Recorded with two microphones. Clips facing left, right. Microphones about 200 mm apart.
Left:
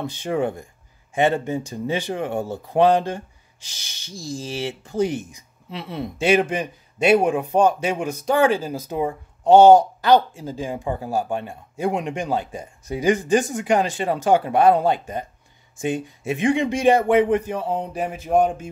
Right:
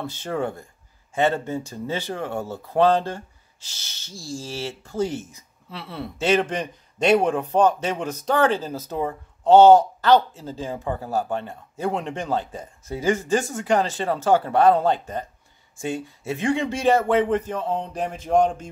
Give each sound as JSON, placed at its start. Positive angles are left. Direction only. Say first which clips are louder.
{"t": 0.0, "sound": "speech", "louder": "left 3 dB", "side_deg": 15}